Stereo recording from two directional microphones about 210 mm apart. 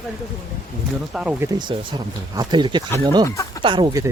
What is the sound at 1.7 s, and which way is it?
Speech, 25° right (ahead or behind).